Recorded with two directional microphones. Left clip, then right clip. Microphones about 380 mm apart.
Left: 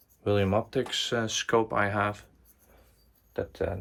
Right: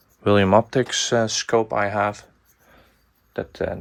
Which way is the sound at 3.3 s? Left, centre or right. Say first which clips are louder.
Right 5 dB; right.